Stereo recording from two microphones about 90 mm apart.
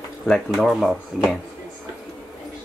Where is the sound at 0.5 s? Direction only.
Centre (ahead or behind).